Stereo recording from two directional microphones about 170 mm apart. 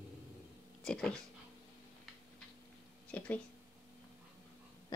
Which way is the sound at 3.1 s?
10° left (ahead or behind).